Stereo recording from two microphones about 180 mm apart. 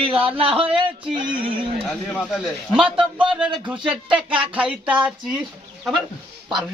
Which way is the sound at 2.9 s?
30° right (ahead or behind).